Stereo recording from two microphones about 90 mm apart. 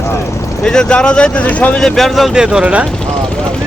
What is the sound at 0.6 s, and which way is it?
Speech, 10° left (ahead or behind).